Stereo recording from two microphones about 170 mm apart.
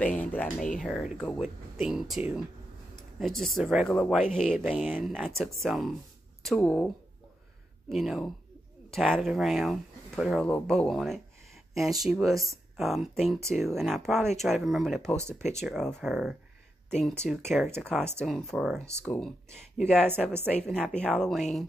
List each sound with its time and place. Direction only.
0.0 s speech: 10° left (ahead or behind)
7.9 s speech: centre (ahead or behind)
15.1 s speech: 15° right (ahead or behind)
15.6 s speech: centre (ahead or behind)
17.9 s speech: 15° right (ahead or behind)
18.2 s speech: centre (ahead or behind)
20.0 s speech: 10° right (ahead or behind)
20.5 s speech: 5° left (ahead or behind)